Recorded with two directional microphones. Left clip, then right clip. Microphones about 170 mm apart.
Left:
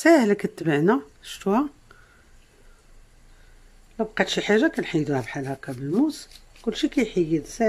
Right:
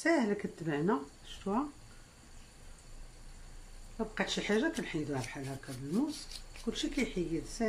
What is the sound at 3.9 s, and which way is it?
Speech, 60° left (ahead or behind).